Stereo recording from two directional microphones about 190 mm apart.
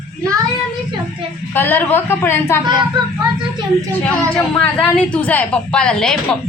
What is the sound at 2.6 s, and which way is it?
Speech, 25° right (ahead or behind).